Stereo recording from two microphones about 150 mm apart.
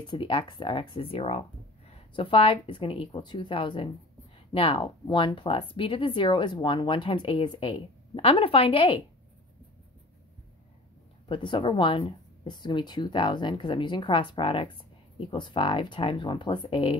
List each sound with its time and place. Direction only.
0.0 s speech: 35° left (ahead or behind)
11.2 s speech: 35° left (ahead or behind)